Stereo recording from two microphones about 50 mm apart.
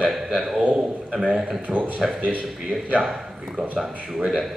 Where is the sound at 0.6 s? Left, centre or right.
Right.